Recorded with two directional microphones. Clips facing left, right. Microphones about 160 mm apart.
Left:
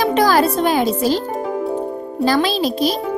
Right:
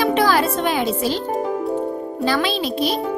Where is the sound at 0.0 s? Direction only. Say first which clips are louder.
Left 2 dB; 40° left (ahead or behind).